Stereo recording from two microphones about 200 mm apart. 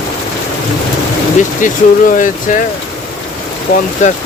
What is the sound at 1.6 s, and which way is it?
Speech, 40° left (ahead or behind).